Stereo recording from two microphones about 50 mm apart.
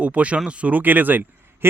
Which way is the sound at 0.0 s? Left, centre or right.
Right.